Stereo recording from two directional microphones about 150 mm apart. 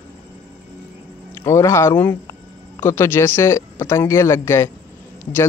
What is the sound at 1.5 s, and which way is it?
Speech, 20° left (ahead or behind).